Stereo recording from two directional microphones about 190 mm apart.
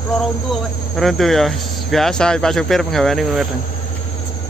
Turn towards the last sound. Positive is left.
turn(degrees=0)  # may be behind; listen again after turning